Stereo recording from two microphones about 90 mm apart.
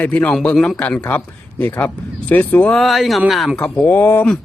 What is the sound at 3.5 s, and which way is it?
Speech, 10° left (ahead or behind).